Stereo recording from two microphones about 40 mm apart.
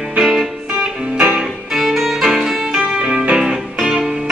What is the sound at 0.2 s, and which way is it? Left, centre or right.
Music, centre.